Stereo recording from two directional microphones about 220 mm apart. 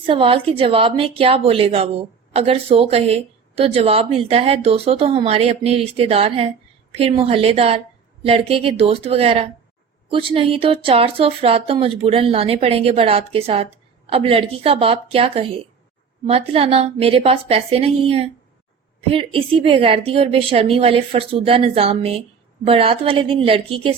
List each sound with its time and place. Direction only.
0.0 s a woman's voice: 25° right (ahead or behind)